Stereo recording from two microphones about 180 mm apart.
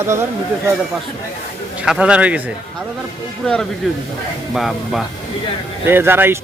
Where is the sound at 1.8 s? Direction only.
5° right (ahead or behind).